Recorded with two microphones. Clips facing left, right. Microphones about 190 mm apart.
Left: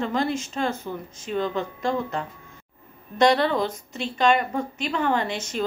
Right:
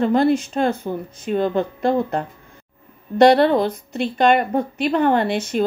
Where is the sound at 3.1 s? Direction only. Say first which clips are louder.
Right 7 dB; 60° right (ahead or behind).